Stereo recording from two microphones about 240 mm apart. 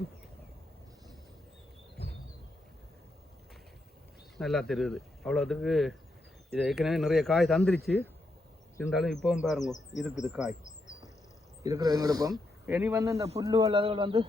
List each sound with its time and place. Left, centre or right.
4.4 s speech: centre
11.6 s speech: centre